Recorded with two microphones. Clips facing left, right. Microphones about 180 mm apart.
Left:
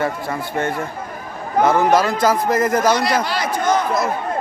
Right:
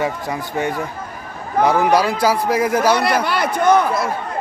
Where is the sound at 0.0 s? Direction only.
15° right (ahead or behind).